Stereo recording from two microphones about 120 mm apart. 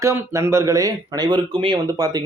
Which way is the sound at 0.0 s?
25° right (ahead or behind).